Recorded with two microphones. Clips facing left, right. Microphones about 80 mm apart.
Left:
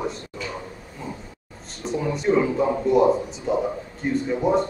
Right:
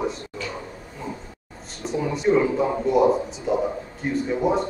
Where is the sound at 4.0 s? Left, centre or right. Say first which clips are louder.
Even; centre.